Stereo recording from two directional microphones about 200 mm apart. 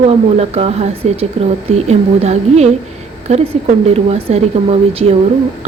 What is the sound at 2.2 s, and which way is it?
Speech, 35° right (ahead or behind).